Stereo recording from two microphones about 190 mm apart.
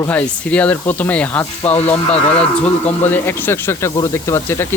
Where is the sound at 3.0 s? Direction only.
10° left (ahead or behind).